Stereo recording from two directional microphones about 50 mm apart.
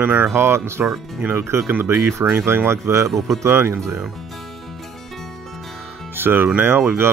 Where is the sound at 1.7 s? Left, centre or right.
Right.